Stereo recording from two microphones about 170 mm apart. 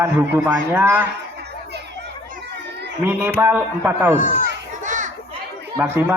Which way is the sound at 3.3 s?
10° right (ahead or behind).